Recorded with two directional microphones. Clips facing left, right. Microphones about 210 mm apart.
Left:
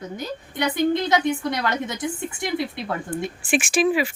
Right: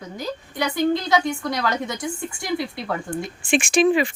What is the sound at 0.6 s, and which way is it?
Speech, 20° left (ahead or behind).